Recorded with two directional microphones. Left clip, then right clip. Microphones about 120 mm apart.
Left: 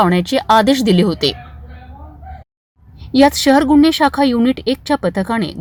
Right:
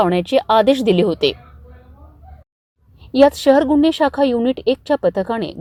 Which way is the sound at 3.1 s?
25° right (ahead or behind).